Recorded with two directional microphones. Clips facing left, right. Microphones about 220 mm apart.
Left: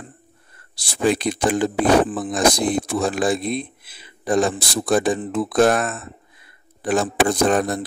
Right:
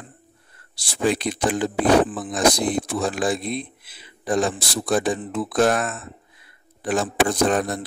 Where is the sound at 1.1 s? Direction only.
50° left (ahead or behind).